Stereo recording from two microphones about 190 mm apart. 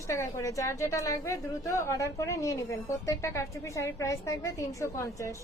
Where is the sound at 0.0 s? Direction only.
15° left (ahead or behind).